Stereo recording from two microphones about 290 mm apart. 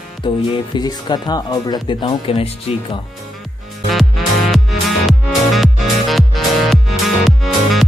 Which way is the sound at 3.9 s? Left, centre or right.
Centre.